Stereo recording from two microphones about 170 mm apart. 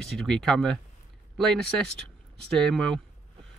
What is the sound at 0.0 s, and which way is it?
Speech, 5° left (ahead or behind).